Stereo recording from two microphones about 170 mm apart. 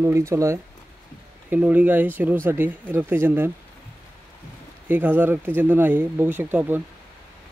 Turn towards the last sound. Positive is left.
turn(degrees=-10)  # may be behind; listen again after turning